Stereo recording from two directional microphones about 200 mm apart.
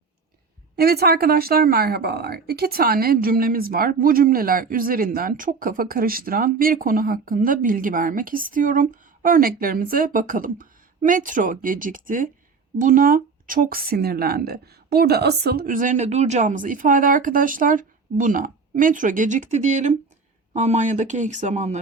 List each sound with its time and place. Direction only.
0.8 s speech: 50° right (ahead or behind); by 21.8 s 35° right (ahead or behind)